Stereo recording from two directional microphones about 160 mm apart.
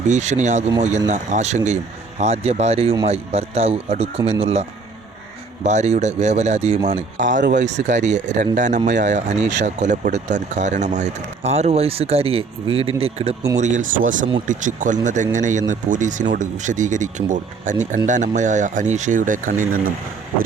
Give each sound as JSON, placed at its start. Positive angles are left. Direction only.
{"t": 0.1, "sound": "speech", "side_deg": -45}
{"t": 5.6, "sound": "speech", "side_deg": -45}
{"t": 13.6, "sound": "speech", "side_deg": -50}